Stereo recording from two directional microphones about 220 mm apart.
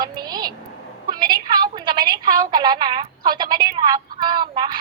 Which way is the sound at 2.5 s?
20° right (ahead or behind).